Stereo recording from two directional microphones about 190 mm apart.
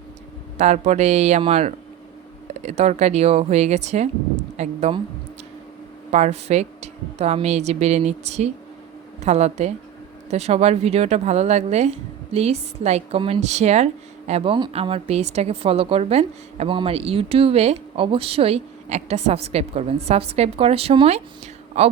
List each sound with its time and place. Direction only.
0.6 s speech: 35° right (ahead or behind)
6.1 s speech: 35° right (ahead or behind)